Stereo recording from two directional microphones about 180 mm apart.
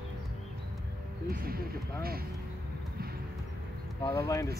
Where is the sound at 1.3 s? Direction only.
55° right (ahead or behind).